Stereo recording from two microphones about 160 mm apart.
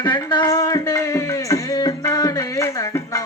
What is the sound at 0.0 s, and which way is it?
Speech, 25° left (ahead or behind).